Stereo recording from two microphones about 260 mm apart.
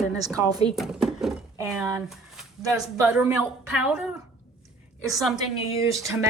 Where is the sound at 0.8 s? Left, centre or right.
Centre.